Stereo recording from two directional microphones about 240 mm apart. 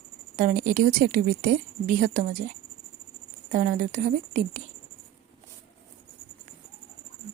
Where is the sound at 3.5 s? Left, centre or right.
Right.